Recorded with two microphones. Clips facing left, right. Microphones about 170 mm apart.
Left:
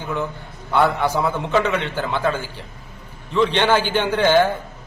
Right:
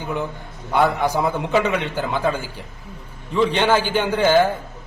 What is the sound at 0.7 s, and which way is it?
A man's voice, 5° right (ahead or behind).